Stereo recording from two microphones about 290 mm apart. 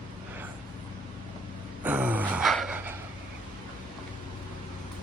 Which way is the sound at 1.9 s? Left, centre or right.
Centre.